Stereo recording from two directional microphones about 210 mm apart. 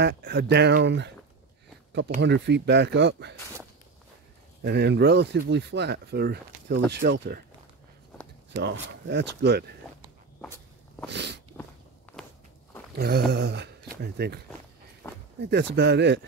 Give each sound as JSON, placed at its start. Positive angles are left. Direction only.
{"t": 0.0, "sound": "speech", "side_deg": -55}
{"t": 2.2, "sound": "speech", "side_deg": -55}
{"t": 4.6, "sound": "speech", "side_deg": -50}
{"t": 8.6, "sound": "speech", "side_deg": -55}
{"t": 11.1, "sound": "a sound", "side_deg": -55}
{"t": 11.6, "sound": "walk", "side_deg": 10}
{"t": 12.9, "sound": "speech", "side_deg": -50}
{"t": 15.0, "sound": "a sound", "side_deg": 10}
{"t": 15.4, "sound": "speech", "side_deg": -55}